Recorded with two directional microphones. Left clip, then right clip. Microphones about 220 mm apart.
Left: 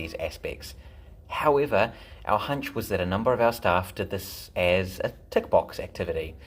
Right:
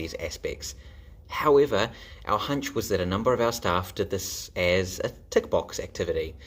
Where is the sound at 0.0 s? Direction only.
35° right (ahead or behind).